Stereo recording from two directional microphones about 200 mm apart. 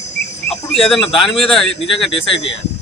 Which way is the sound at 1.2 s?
25° left (ahead or behind).